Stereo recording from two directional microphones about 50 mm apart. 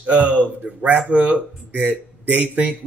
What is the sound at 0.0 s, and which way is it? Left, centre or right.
Speech, right.